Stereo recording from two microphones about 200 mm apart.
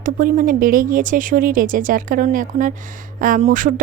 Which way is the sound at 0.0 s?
45° right (ahead or behind).